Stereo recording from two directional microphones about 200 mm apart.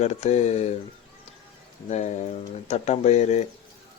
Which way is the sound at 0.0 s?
35° left (ahead or behind).